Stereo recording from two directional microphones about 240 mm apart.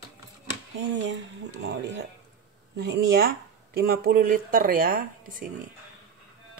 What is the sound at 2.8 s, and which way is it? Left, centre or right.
A woman's voice, right.